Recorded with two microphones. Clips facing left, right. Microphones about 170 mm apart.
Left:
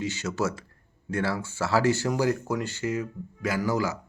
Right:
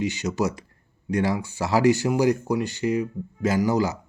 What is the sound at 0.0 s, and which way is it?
Speech, 15° right (ahead or behind).